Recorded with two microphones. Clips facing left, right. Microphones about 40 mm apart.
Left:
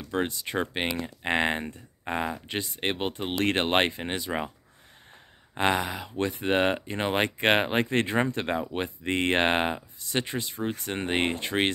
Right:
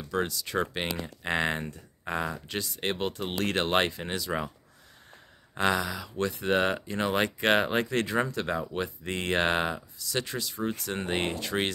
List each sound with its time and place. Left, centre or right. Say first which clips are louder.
0.1 s speech: left 1 dB; left
5.6 s speech: left 1 dB; left